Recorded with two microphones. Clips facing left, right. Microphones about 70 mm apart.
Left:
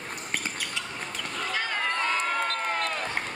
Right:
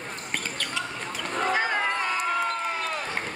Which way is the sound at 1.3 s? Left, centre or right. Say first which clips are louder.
Right 6 dB; right.